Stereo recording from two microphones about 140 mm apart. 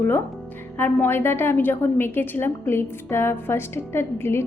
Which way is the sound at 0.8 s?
15° left (ahead or behind).